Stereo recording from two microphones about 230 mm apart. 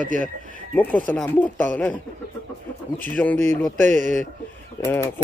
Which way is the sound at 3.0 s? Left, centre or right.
Centre.